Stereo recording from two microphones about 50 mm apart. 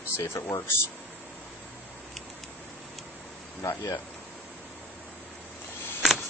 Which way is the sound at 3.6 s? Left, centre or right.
Left.